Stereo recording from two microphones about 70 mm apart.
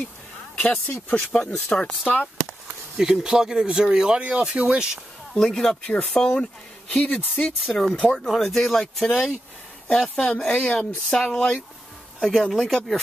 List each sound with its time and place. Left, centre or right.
0.6 s speech: left
3.0 s speech: centre
5.3 s speech: centre
7.6 s speech: centre